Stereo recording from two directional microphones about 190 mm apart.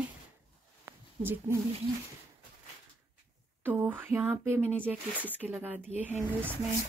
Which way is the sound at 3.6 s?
10° right (ahead or behind).